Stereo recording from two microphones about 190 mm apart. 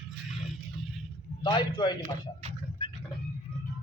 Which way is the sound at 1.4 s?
25° left (ahead or behind).